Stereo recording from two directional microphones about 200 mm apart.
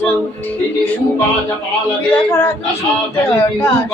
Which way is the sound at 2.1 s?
10° left (ahead or behind).